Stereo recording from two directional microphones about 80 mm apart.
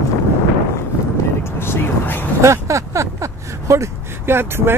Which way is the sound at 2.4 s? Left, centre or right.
Right.